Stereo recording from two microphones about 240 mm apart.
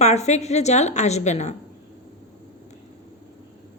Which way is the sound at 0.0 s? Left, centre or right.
Left.